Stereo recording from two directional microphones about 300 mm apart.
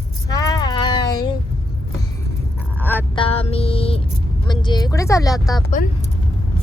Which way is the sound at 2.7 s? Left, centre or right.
Centre.